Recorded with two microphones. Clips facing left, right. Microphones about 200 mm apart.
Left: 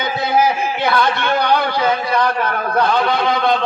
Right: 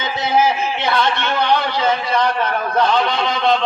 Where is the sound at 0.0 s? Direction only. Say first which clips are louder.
Left 1 dB; 25° right (ahead or behind).